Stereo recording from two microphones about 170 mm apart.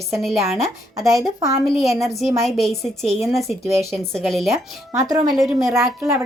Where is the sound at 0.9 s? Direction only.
20° right (ahead or behind).